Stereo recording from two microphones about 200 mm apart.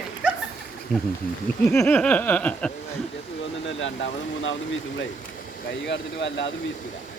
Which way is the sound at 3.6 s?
70° left (ahead or behind).